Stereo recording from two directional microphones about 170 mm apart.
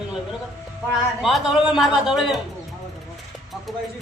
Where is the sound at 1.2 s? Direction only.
5° right (ahead or behind).